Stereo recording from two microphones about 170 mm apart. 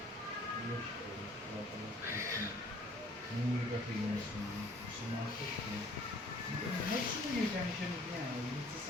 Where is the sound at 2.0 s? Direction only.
15° right (ahead or behind).